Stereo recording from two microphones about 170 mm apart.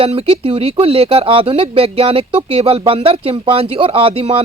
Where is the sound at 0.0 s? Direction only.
35° right (ahead or behind).